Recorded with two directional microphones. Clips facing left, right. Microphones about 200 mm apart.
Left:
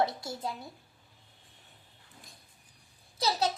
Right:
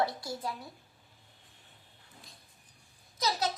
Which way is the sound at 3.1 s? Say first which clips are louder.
Left 2 dB; 30° left (ahead or behind).